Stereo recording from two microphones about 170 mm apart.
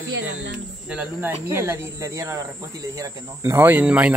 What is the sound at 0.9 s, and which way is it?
Speech, 15° right (ahead or behind).